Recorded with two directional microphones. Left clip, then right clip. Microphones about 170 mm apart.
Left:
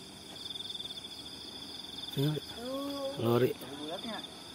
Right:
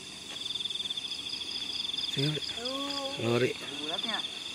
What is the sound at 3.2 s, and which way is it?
Speech, 20° left (ahead or behind).